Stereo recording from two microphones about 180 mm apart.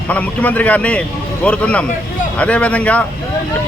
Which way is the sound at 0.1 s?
10° left (ahead or behind).